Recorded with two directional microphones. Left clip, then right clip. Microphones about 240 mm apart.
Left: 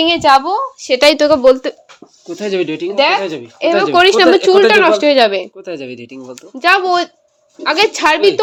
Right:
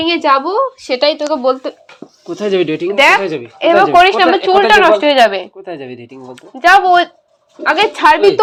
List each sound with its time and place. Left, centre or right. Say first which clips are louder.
0.1 s speech: even; left
0.4 s speech: right 2 dB; centre
0.9 s speech: left 5 dB; left
1.4 s speech: left 5 dB; left
2.2 s speech: right 3 dB; centre
3.4 s a woman's voice: right 4 dB; centre
3.9 s speech: even; left
5.6 s speech: left 1 dB; left
6.3 s a woman's voice: right 4 dB; left